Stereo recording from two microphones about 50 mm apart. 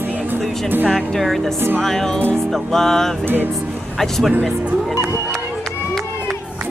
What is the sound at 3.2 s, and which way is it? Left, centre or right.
Speech, right.